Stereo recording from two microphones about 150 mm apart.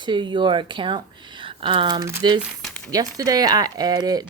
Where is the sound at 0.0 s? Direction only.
30° right (ahead or behind).